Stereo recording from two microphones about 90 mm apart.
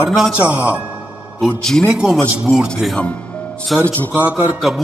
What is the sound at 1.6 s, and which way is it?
Speech, 5° left (ahead or behind).